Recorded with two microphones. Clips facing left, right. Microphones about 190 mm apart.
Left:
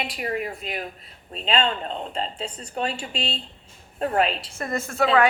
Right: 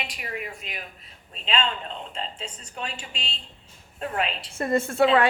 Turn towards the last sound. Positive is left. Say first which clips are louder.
# right 4 dB
turn(degrees=-30)  # may be behind; listen again after turning